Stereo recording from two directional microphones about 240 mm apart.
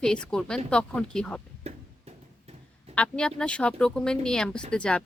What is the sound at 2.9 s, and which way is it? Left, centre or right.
A woman's voice, centre.